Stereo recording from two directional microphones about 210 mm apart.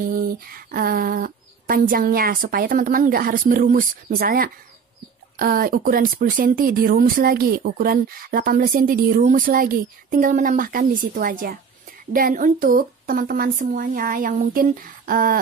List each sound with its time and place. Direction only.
0.0 s a woman's voice: 45° right (ahead or behind)